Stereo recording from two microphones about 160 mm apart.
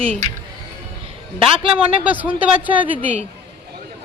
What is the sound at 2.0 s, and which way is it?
Speech, 10° right (ahead or behind).